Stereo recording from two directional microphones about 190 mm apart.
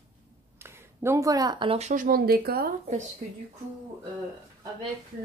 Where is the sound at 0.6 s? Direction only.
15° right (ahead or behind); by 2.7 s 55° right (ahead or behind).